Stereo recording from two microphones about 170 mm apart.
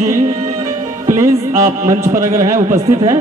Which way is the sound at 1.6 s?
20° right (ahead or behind).